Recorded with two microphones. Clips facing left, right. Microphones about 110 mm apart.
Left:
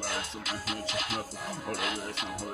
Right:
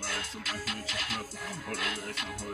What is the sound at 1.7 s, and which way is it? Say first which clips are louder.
Speech: left 2 dB; 20° left (ahead or behind).